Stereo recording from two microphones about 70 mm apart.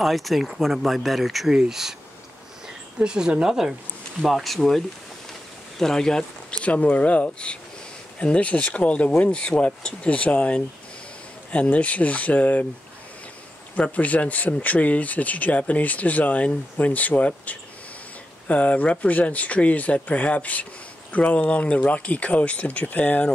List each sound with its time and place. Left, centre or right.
0.0 s speech: centre
3.0 s speech: centre; by 12.6 s left
13.9 s speech: left